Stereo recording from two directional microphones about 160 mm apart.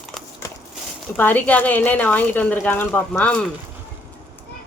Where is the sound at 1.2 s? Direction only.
10° left (ahead or behind).